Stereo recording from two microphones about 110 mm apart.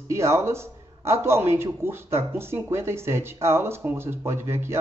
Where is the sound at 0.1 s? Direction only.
25° right (ahead or behind).